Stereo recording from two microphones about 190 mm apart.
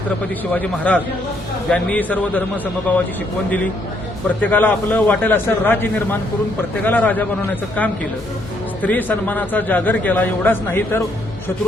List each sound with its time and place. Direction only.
0.5 s a man's voice: 10° left (ahead or behind)
4.4 s a man's voice: 10° left (ahead or behind)
8.8 s a man's voice: 10° left (ahead or behind)